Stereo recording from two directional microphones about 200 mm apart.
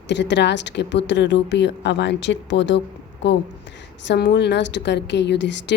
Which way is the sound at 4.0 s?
60° left (ahead or behind).